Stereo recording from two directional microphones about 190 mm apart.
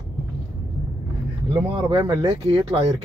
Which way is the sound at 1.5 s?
25° right (ahead or behind).